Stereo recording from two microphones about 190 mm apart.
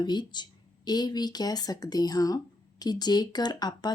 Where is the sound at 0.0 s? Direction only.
25° left (ahead or behind).